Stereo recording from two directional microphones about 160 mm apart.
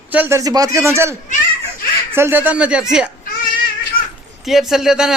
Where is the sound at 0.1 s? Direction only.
15° right (ahead or behind).